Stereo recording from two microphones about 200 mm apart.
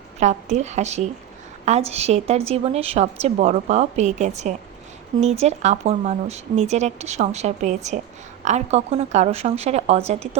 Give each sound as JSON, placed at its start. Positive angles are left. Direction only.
{"t": 0.2, "sound": "speech", "side_deg": -35}